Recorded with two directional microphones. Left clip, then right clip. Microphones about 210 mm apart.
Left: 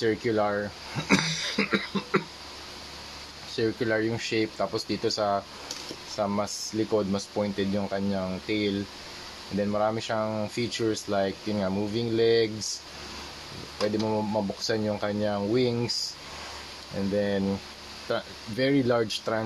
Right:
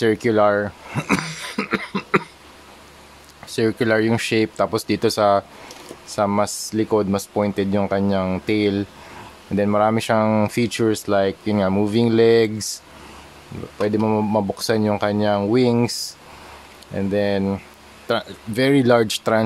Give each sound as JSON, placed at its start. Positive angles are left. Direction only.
{"t": 0.0, "sound": "a sound", "side_deg": -50}
{"t": 3.5, "sound": "speech", "side_deg": -45}
{"t": 13.8, "sound": "speech", "side_deg": -50}
{"t": 16.9, "sound": "speech", "side_deg": -40}